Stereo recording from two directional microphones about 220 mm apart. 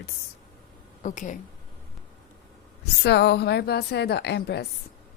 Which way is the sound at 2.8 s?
50° left (ahead or behind).